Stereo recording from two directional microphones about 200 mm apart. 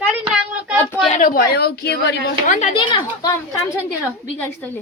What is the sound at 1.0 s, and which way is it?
Speech, 40° left (ahead or behind).